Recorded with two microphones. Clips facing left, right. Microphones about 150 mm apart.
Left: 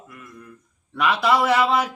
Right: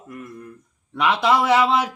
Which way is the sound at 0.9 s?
20° right (ahead or behind).